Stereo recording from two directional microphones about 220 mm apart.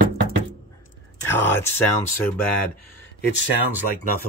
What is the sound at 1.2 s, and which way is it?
Speech, 10° left (ahead or behind).